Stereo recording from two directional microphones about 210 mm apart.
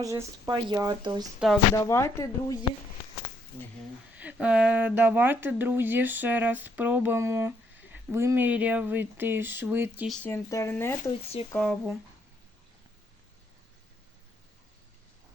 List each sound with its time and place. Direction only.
0.0 s speech: 15° right (ahead or behind)
1.7 s speech: 15° left (ahead or behind)
4.2 s speech: 5° right (ahead or behind)
10.1 s speech: 10° left (ahead or behind)